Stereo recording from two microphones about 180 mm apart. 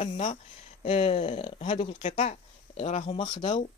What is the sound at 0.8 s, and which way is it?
Speech, 35° left (ahead or behind).